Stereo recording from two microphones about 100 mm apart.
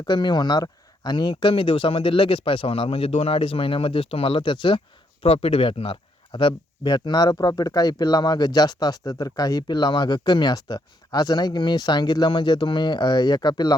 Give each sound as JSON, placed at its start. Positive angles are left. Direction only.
{"t": 0.0, "sound": "speech", "side_deg": 45}
{"t": 5.2, "sound": "speech", "side_deg": 80}